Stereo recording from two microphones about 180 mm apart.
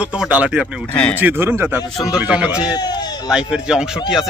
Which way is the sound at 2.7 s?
20° left (ahead or behind).